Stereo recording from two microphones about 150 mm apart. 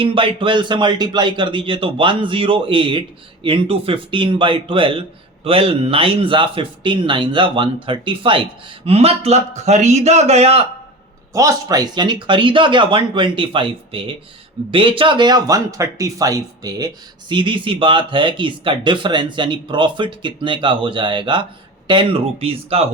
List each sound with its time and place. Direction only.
0.0 s speech: 35° right (ahead or behind)
11.3 s speech: 25° right (ahead or behind); by 22.9 s 40° right (ahead or behind)